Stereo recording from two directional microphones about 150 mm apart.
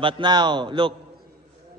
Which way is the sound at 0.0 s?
30° right (ahead or behind).